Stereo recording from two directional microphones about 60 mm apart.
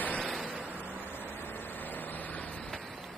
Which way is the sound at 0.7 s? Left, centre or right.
Right.